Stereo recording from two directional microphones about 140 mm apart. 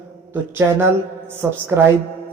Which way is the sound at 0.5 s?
15° right (ahead or behind).